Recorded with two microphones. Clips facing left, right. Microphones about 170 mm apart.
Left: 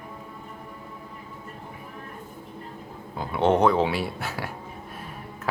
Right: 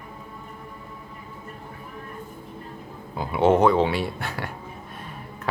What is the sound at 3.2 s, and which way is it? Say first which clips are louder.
Speech: right 2 dB; 5° right (ahead or behind).